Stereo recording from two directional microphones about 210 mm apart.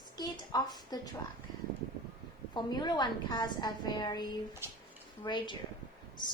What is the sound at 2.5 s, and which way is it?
A woman's voice, 20° left (ahead or behind).